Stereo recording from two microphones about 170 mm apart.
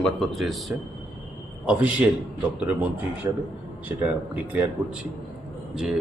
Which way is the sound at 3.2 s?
20° right (ahead or behind).